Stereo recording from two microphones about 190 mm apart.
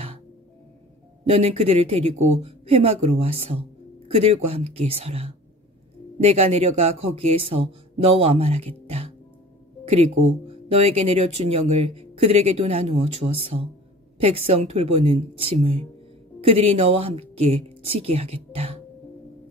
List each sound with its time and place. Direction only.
1.3 s a woman's voice: 30° right (ahead or behind)